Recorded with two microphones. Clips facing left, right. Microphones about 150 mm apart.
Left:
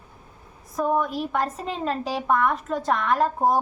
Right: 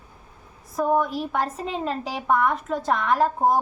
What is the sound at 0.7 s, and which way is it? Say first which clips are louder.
A woman's voice: right 1 dB; 5° right (ahead or behind).